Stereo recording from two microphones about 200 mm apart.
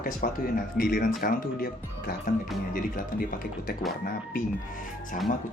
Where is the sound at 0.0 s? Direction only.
45° left (ahead or behind).